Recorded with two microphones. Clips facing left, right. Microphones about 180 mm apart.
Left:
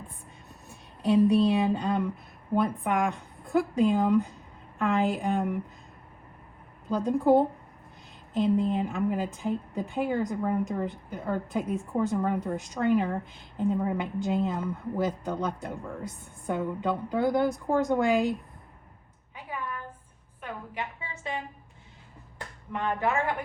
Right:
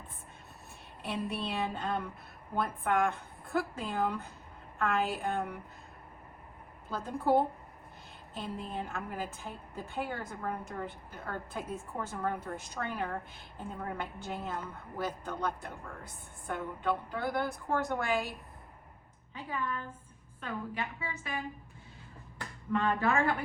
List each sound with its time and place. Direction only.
1.5 s a woman's voice: 15° left (ahead or behind)
6.8 s a woman's voice: 20° left (ahead or behind)
19.3 s a sound: 10° left (ahead or behind)
20.4 s a woman's voice: 20° left (ahead or behind)
22.7 s a woman's voice: 15° left (ahead or behind)